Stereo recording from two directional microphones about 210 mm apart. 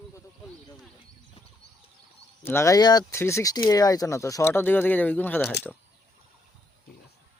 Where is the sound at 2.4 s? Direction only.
15° left (ahead or behind).